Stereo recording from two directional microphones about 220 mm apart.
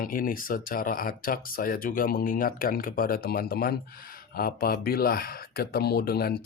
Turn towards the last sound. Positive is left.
turn(degrees=45)  # may be behind; listen again after turning